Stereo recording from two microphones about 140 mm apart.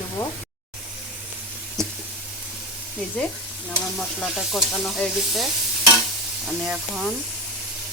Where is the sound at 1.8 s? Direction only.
5° left (ahead or behind).